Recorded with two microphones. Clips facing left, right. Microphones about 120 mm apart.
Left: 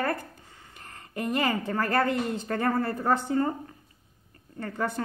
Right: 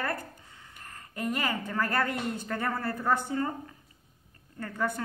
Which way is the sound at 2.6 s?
15° left (ahead or behind).